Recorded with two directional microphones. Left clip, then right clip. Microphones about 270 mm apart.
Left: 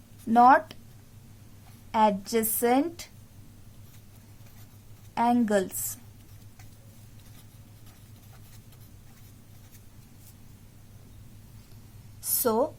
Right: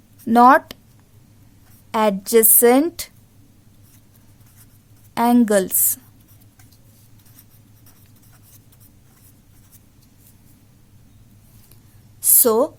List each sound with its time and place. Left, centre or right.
0.3 s a woman's voice: right
1.9 s a woman's voice: right
5.1 s a woman's voice: right
12.4 s speech: right